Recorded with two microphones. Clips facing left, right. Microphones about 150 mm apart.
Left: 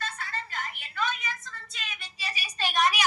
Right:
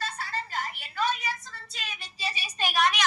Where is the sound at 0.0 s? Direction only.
35° right (ahead or behind).